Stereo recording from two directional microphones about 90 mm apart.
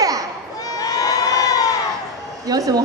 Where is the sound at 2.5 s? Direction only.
45° right (ahead or behind).